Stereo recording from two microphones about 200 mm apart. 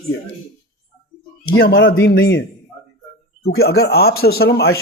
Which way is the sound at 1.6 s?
55° left (ahead or behind).